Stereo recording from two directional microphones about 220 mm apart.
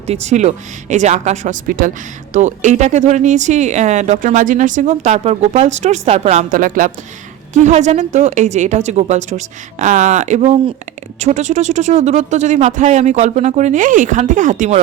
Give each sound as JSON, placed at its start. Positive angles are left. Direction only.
{"t": 0.1, "sound": "speech", "side_deg": -30}